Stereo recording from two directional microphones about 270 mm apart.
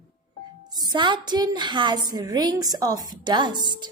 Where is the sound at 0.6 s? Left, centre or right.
Centre.